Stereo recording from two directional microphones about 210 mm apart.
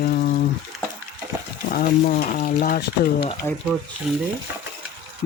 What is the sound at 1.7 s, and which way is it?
Speech, 40° left (ahead or behind).